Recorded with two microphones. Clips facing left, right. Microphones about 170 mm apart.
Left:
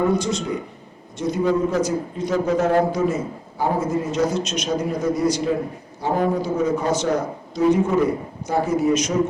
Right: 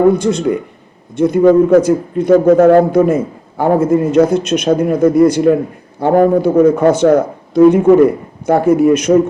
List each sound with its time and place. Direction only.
0.1 s a man's voice: 55° right (ahead or behind)